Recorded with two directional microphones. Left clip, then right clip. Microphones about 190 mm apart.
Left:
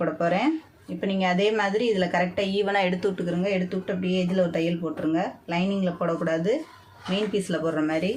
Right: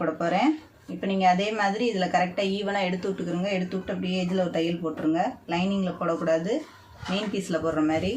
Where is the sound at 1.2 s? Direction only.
40° left (ahead or behind).